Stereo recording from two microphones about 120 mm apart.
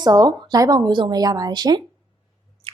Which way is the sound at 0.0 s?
30° right (ahead or behind).